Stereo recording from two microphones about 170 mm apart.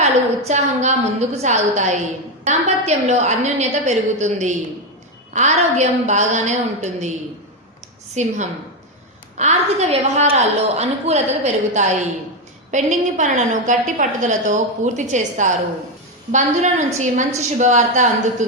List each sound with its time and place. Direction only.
0.0 s a woman's voice: 40° right (ahead or behind)
8.1 s a woman's voice: 45° right (ahead or behind)